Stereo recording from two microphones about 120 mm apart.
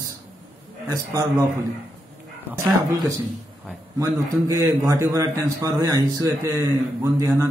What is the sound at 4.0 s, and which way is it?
A man's voice, 25° right (ahead or behind).